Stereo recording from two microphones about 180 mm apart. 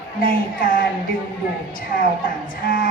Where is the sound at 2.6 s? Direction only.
55° left (ahead or behind).